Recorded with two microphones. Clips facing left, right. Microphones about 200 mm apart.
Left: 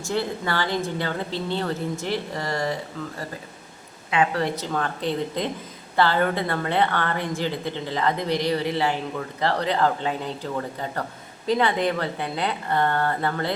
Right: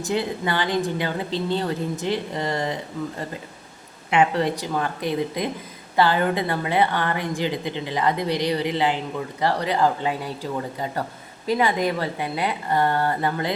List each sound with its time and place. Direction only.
0.0 s a woman's voice: 15° right (ahead or behind)
4.1 s a woman's voice: 25° right (ahead or behind)
4.5 s a woman's voice: 10° right (ahead or behind)